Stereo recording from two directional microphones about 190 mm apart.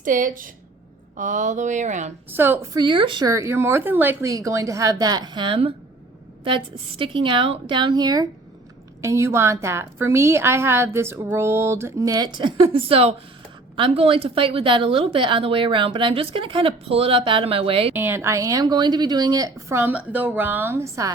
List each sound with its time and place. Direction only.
0.0 s a woman's voice: 45° right (ahead or behind)
2.3 s a woman's voice: 10° right (ahead or behind); by 5.7 s 25° right (ahead or behind)
7.0 s a woman's voice: 25° right (ahead or behind)
17.9 s a woman's voice: 10° right (ahead or behind)